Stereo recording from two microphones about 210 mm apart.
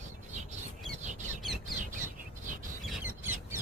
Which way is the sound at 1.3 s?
Centre (ahead or behind).